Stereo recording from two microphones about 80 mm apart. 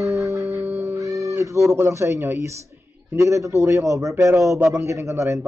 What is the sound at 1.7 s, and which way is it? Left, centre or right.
A man's voice, right.